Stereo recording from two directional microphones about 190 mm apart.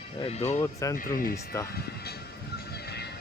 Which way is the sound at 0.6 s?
15° left (ahead or behind).